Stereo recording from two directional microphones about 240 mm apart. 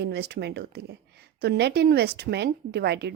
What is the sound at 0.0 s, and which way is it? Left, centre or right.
A woman's voice, right.